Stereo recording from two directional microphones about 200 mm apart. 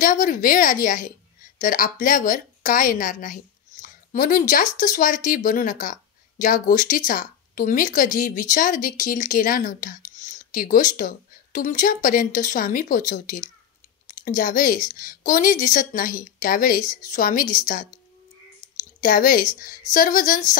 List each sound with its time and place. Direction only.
0.0 s a woman's voice: 45° left (ahead or behind)
18.9 s speech: 45° left (ahead or behind)